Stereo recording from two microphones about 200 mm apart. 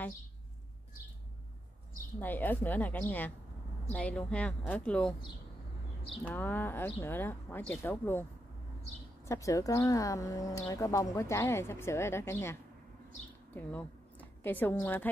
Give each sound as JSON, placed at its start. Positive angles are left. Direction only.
{"t": 2.1, "sound": "speech", "side_deg": 10}
{"t": 6.2, "sound": "speech", "side_deg": 10}
{"t": 13.6, "sound": "a woman's voice", "side_deg": 10}